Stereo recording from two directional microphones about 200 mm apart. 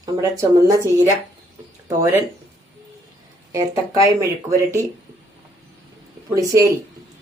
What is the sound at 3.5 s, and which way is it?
Speech, 20° right (ahead or behind).